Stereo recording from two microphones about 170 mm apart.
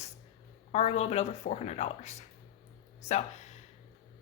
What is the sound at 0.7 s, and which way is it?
Speech, 40° left (ahead or behind).